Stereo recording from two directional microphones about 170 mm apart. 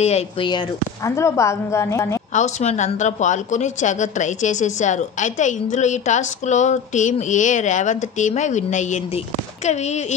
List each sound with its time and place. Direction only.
0.0 s speech: 40° left (ahead or behind)
1.0 s a woman's voice: 15° left (ahead or behind)
2.3 s a woman's voice: 40° left (ahead or behind)